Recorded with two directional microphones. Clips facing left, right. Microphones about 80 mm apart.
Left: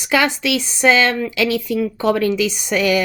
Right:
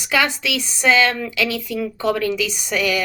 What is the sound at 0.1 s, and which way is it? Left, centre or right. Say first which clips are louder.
A woman's voice: left 3 dB; left.